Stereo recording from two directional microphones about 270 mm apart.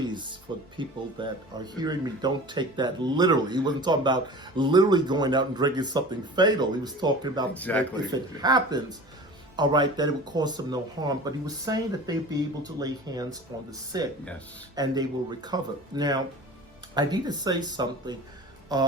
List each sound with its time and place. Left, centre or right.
0.0 s music: centre
0.8 s speech: centre
7.5 s speech: centre
7.9 s speech: centre